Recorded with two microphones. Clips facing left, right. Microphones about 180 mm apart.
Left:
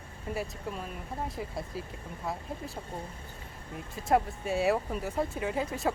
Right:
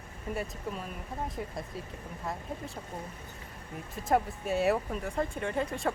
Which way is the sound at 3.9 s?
Centre (ahead or behind).